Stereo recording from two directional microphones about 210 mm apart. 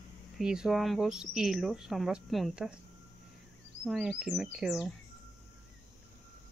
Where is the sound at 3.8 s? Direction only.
5° right (ahead or behind).